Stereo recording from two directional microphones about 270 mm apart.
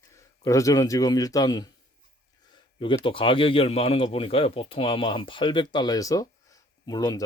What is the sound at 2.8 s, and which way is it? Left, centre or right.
Speech, centre.